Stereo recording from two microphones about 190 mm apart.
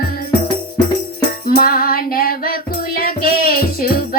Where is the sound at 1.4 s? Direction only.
50° left (ahead or behind).